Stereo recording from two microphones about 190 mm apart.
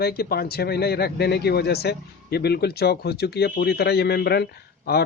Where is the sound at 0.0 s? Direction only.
55° left (ahead or behind).